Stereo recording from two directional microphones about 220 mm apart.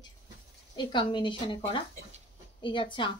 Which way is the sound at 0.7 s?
20° left (ahead or behind).